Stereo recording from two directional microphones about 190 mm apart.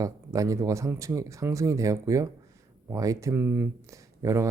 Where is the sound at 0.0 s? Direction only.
15° right (ahead or behind).